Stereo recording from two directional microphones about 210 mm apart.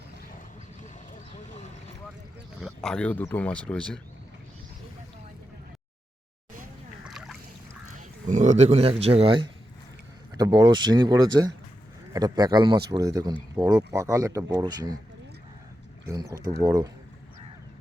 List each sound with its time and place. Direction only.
0.8 s boat: 35° left (ahead or behind)
2.6 s speech: centre (ahead or behind)
7.0 s boat: centre (ahead or behind)
7.9 s speech: 35° right (ahead or behind); by 14.9 s 20° right (ahead or behind)
16.0 s speech: 15° right (ahead or behind)